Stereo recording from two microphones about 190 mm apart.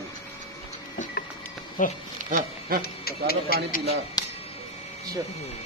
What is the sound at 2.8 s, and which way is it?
Speech, 55° left (ahead or behind).